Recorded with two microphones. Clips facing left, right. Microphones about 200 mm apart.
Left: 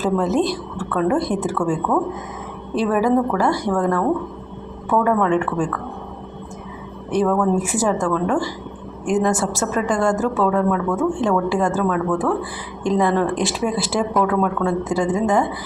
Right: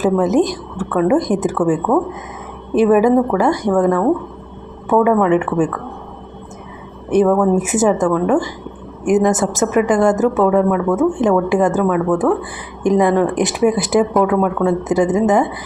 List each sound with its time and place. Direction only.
0.0 s a woman's voice: 15° right (ahead or behind)
7.1 s a woman's voice: 20° right (ahead or behind)